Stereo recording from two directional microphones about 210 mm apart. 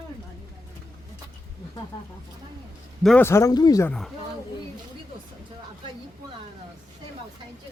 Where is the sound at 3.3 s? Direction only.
15° left (ahead or behind).